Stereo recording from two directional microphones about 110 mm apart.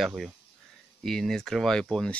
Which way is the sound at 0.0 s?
Centre (ahead or behind).